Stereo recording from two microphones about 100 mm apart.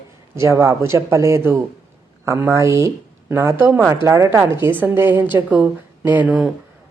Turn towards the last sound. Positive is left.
turn(degrees=-20)  # may be behind; listen again after turning